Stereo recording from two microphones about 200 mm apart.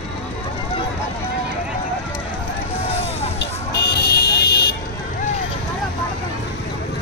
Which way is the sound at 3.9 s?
50° left (ahead or behind).